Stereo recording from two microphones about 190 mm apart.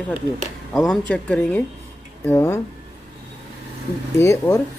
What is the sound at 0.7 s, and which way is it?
Speech, 5° left (ahead or behind).